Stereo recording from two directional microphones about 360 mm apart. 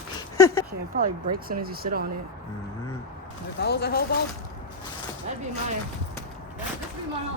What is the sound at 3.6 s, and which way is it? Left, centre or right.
Speech, left.